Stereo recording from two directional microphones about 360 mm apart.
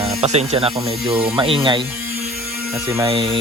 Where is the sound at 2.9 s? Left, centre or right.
Centre.